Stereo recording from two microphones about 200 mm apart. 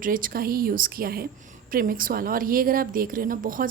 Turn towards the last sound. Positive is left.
turn(degrees=-40)  # may be behind; listen again after turning